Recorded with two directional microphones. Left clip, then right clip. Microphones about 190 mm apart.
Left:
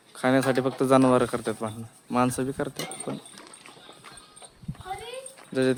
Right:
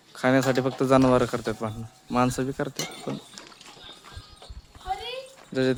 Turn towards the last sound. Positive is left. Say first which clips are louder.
# even
turn(degrees=-5)  # may be behind; listen again after turning